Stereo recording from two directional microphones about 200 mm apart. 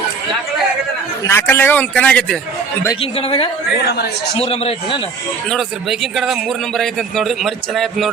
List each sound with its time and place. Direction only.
1.3 s a man's voice: 10° left (ahead or behind)
3.0 s a man's voice: 30° left (ahead or behind)
5.5 s a man's voice: centre (ahead or behind)